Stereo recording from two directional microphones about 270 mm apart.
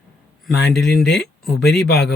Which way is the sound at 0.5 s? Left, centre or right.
Left.